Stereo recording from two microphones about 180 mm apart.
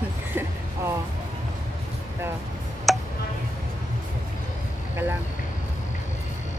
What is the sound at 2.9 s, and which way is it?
Tick, centre (ahead or behind).